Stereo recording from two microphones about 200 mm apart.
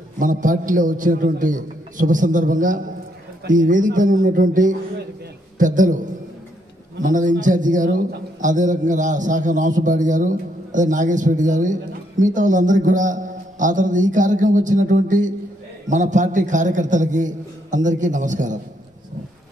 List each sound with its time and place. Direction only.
0.2 s a man's voice: 40° right (ahead or behind)